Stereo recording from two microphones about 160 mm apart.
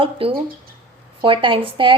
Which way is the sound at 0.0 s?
35° right (ahead or behind).